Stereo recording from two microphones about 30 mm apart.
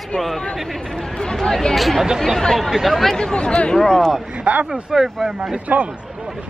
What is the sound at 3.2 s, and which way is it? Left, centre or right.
Speech, left.